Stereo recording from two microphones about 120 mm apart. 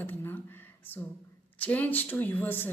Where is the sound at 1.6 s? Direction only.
15° left (ahead or behind).